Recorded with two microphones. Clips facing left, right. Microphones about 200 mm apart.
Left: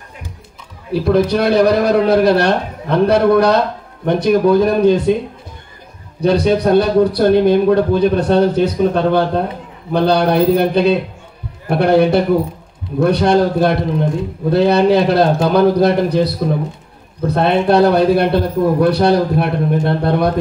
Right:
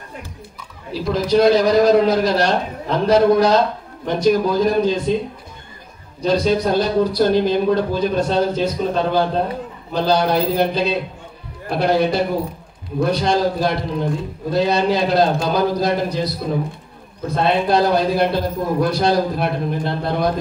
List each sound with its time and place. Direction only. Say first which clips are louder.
0.9 s a man's voice: left 3 dB; 60° left (ahead or behind)
6.2 s a man's voice: left 4 dB; 60° left (ahead or behind)